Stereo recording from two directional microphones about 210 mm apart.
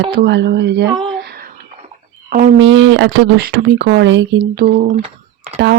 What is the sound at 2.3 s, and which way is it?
Speech, 40° right (ahead or behind).